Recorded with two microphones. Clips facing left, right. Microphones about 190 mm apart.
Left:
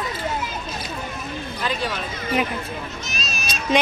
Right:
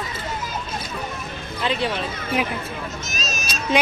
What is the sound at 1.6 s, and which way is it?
Speech, 25° right (ahead or behind).